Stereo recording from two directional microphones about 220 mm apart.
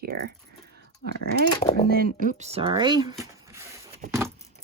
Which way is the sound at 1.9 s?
40° right (ahead or behind).